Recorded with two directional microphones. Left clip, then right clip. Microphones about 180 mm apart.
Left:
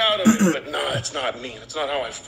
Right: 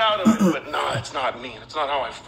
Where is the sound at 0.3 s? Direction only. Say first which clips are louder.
Left 1 dB; 15° left (ahead or behind).